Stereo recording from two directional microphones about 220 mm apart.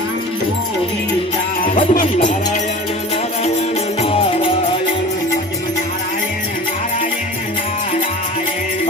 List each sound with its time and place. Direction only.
1.6 s music: 40° left (ahead or behind)